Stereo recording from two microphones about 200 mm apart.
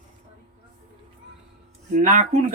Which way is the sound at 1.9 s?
40° right (ahead or behind).